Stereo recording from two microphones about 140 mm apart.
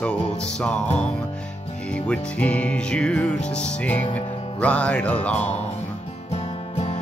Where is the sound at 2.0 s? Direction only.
10° left (ahead or behind).